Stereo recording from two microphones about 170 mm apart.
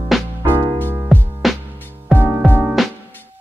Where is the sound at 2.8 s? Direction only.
Centre (ahead or behind).